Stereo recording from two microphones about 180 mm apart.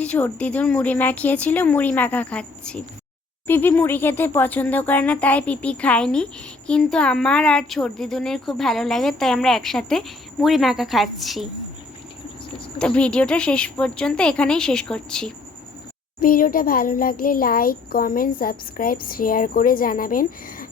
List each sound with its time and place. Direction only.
0.0 s a woman's voice: 5° left (ahead or behind)
12.8 s a woman's voice: 5° left (ahead or behind)
16.2 s a child's voice: 50° left (ahead or behind)